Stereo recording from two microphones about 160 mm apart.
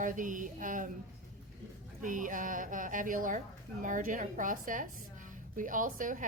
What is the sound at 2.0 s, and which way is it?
A woman's voice, 55° right (ahead or behind).